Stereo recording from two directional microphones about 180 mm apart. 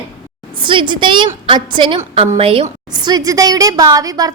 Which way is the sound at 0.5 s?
25° right (ahead or behind).